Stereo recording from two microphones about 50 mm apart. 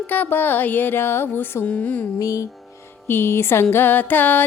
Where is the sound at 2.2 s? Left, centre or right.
Left.